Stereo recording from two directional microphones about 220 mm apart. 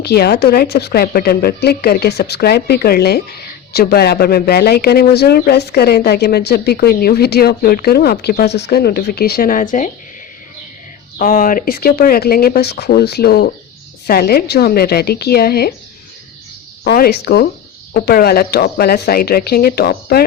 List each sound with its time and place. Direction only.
0.0 s speech: 45° left (ahead or behind)
11.2 s speech: 40° left (ahead or behind)
16.8 s speech: 45° left (ahead or behind)